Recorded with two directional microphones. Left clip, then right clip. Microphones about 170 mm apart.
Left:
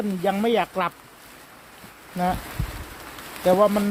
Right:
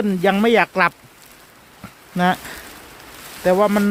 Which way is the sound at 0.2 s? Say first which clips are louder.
Right 6 dB; 50° right (ahead or behind).